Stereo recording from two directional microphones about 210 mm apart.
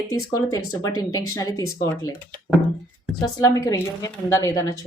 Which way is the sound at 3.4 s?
15° left (ahead or behind).